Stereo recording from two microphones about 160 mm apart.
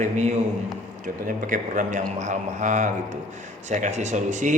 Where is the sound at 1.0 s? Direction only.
60° right (ahead or behind).